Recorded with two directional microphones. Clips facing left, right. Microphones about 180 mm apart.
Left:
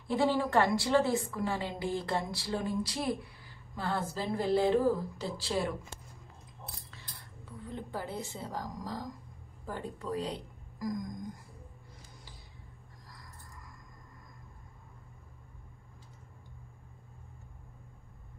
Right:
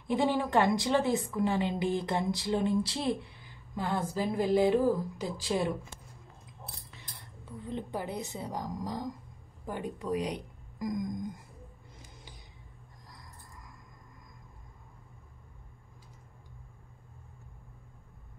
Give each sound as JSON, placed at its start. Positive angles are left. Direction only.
{"t": 0.1, "sound": "a woman's voice", "side_deg": -20}
{"t": 7.6, "sound": "a woman's voice", "side_deg": -20}